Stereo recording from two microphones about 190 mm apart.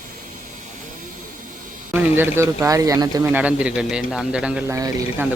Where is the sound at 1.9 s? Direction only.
10° right (ahead or behind).